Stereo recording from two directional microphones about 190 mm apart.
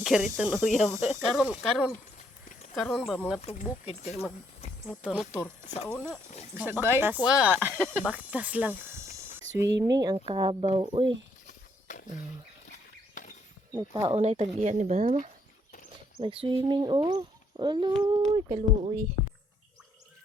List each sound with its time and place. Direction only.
0.0 s speech: 5° right (ahead or behind)
3.4 s speech: 35° left (ahead or behind)
4.9 s speech: 5° right (ahead or behind)
5.6 s speech: 40° left (ahead or behind)
5.9 s speech: 5° left (ahead or behind)
6.6 s speech: 10° right (ahead or behind)
9.8 s speech: 20° right (ahead or behind)
12.7 s a sound: 45° left (ahead or behind)
13.7 s speech: 20° right (ahead or behind)
14.2 s speech: 35° right (ahead or behind)